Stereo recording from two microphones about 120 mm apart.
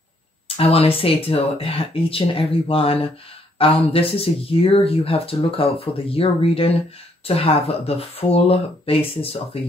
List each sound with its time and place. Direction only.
0.6 s speech: 55° left (ahead or behind)